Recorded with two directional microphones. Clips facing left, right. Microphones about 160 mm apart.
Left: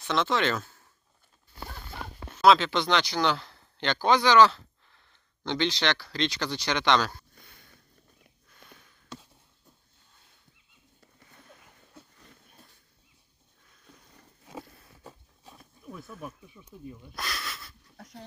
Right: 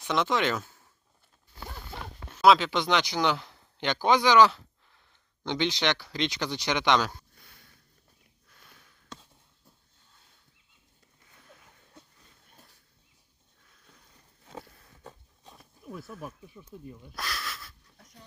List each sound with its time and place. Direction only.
0.0 s speech: 15° right (ahead or behind)
2.3 s speech: 10° right (ahead or behind)
8.8 s a sound: centre (ahead or behind)
14.4 s a sound: 10° left (ahead or behind)
15.9 s speech: 5° right (ahead or behind)
17.9 s dog: 75° left (ahead or behind)